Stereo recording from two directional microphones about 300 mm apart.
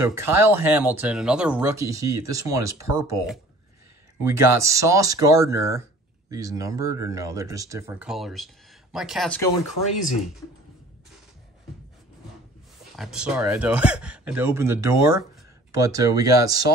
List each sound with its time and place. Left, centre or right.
0.0 s speech: centre
12.9 s speech: centre